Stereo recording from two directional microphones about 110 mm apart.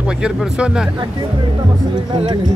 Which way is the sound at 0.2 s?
5° right (ahead or behind).